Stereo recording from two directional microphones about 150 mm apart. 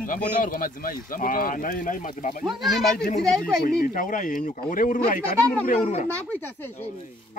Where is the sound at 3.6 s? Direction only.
65° left (ahead or behind).